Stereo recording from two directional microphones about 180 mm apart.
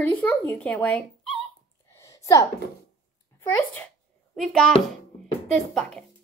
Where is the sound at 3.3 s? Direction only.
10° left (ahead or behind).